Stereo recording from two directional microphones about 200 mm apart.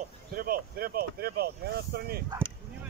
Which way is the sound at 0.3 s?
45° right (ahead or behind).